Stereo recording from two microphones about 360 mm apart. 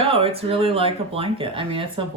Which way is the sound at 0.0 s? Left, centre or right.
Centre.